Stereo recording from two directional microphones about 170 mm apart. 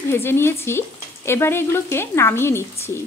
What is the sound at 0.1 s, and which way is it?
A woman's voice, 15° left (ahead or behind).